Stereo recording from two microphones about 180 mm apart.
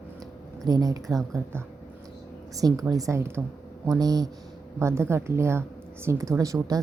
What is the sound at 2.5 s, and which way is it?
A woman's voice, 20° right (ahead or behind).